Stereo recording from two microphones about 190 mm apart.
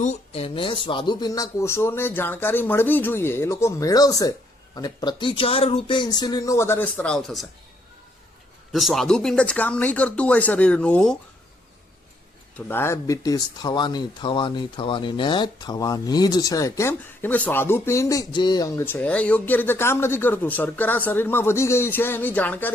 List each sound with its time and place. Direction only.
0.0 s speech: 35° left (ahead or behind); by 7.4 s centre (ahead or behind)
8.7 s speech: centre (ahead or behind)
12.5 s speech: 10° left (ahead or behind)